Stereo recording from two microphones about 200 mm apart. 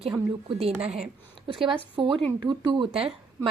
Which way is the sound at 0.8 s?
30° right (ahead or behind).